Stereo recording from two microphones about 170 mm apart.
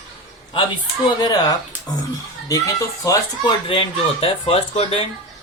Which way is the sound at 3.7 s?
35° left (ahead or behind).